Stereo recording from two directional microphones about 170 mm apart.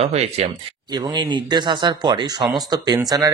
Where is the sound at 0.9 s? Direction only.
25° right (ahead or behind).